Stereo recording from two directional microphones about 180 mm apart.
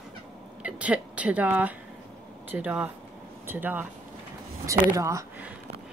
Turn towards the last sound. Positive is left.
turn(degrees=-15)  # may be behind; listen again after turning